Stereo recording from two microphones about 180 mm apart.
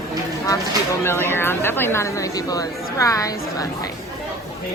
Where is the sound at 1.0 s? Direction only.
15° left (ahead or behind).